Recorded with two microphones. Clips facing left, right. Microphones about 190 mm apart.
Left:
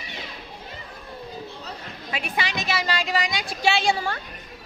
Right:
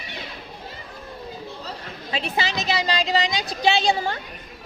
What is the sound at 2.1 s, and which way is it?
Speech, 25° right (ahead or behind).